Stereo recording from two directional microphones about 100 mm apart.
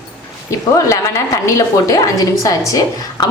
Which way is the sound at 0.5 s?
35° left (ahead or behind).